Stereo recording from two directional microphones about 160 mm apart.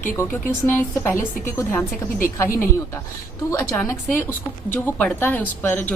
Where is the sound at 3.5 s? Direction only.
15° left (ahead or behind).